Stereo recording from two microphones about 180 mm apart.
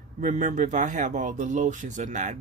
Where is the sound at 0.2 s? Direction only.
40° right (ahead or behind).